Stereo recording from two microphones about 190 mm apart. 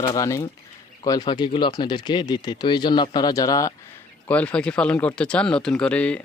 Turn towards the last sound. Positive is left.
turn(degrees=5)  # may be behind; listen again after turning